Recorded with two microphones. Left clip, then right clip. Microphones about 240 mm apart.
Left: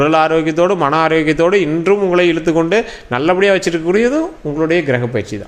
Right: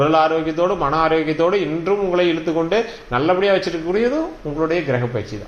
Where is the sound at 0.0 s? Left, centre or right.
Left.